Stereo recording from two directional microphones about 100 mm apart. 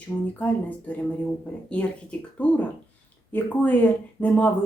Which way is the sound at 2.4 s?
15° left (ahead or behind).